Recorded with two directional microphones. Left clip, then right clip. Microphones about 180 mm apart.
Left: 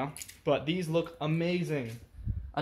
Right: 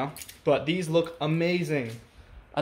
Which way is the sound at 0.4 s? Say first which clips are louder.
Right 5 dB; centre (ahead or behind).